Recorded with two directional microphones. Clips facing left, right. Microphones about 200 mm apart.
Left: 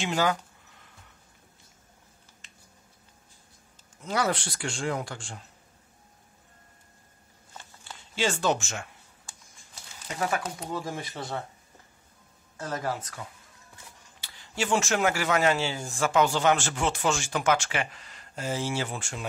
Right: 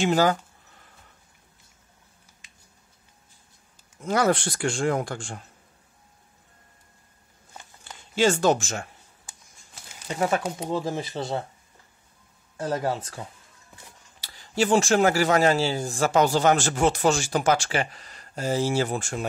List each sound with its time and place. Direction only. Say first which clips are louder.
0.0 s speech: right 6 dB; 40° right (ahead or behind)
4.0 s speech: right 6 dB; 50° right (ahead or behind)
8.2 s speech: right 6 dB; 45° right (ahead or behind)
10.0 s speech: right 5 dB; 25° right (ahead or behind)
12.5 s speech: right 5 dB; 30° right (ahead or behind)